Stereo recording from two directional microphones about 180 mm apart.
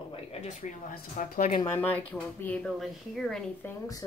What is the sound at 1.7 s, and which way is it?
Speech, 10° left (ahead or behind).